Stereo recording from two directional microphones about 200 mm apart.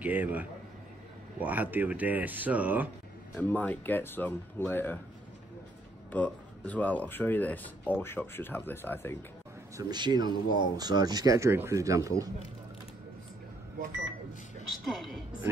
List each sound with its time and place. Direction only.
0.0 s speech: 10° right (ahead or behind)
3.3 s speech: 10° left (ahead or behind)
6.1 s speech: 5° left (ahead or behind)
9.8 s speech: 20° right (ahead or behind)